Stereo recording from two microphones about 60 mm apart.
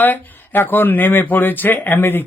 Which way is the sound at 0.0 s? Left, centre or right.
Left.